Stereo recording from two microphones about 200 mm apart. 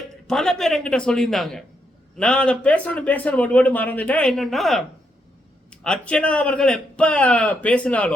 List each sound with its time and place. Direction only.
0.3 s a man's voice: 5° left (ahead or behind)